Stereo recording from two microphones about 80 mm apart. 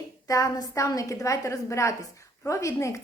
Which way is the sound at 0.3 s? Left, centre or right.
Left.